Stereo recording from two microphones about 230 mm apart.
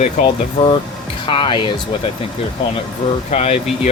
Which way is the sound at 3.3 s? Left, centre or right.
Left.